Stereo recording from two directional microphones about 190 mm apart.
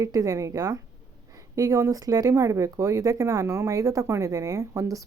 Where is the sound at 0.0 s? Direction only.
15° right (ahead or behind).